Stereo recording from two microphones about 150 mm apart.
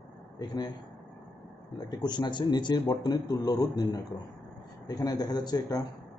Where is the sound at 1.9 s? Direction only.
30° left (ahead or behind).